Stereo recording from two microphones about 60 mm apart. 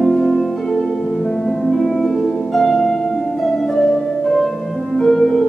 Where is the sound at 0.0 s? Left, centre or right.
Centre.